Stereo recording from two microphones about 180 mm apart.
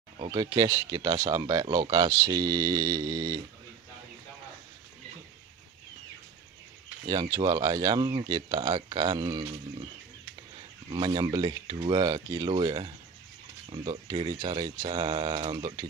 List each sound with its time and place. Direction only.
0.2 s speech: 25° right (ahead or behind)
7.1 s speech: 20° right (ahead or behind)
10.9 s speech: 25° right (ahead or behind)